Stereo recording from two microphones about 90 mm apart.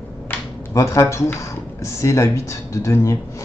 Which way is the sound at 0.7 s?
35° left (ahead or behind).